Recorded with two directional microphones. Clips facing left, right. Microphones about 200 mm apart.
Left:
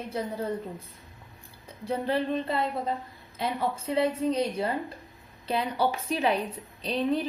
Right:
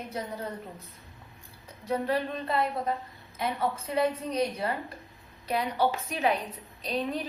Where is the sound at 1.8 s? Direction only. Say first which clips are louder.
Left 1 dB; 30° left (ahead or behind).